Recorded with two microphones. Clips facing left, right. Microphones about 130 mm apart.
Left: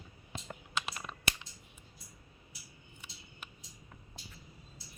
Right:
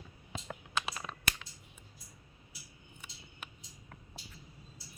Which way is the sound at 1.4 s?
90° right.